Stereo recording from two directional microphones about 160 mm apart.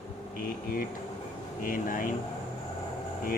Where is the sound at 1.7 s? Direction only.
60° left (ahead or behind).